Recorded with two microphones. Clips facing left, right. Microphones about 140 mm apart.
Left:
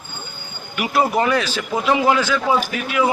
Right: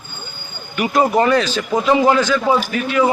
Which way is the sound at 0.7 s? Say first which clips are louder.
Right 3 dB; 10° left (ahead or behind).